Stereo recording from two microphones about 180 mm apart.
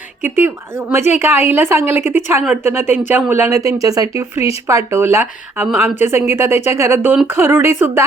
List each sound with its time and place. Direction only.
0.4 s speech: 15° right (ahead or behind)